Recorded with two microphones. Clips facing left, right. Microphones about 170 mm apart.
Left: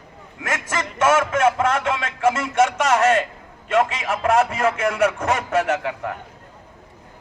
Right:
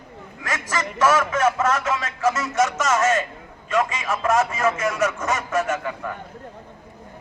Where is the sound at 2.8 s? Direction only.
60° left (ahead or behind).